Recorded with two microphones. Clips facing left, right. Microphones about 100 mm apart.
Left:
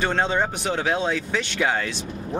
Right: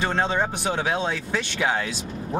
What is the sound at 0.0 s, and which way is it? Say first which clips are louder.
Speech: left 1 dB; centre (ahead or behind).